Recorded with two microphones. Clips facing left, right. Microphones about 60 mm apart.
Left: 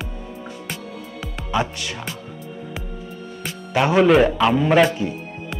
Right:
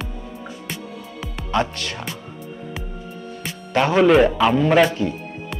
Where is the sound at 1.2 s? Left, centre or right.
Centre.